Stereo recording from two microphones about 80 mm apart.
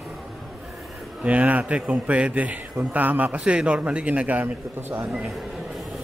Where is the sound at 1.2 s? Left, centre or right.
Centre.